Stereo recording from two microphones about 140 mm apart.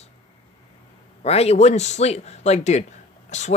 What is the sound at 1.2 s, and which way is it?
Speech, 45° left (ahead or behind).